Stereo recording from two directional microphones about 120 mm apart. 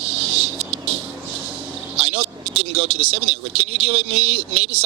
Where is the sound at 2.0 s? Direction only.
55° right (ahead or behind).